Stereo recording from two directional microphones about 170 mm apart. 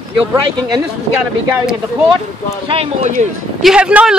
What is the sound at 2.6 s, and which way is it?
Speech, 35° right (ahead or behind).